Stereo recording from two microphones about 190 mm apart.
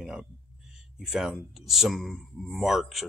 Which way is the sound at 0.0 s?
5° right (ahead or behind).